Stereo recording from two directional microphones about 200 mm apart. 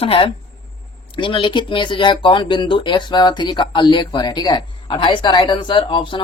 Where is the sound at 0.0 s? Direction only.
25° left (ahead or behind).